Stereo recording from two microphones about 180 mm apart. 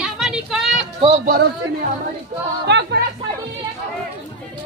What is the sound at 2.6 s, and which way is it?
Speech, 70° right (ahead or behind).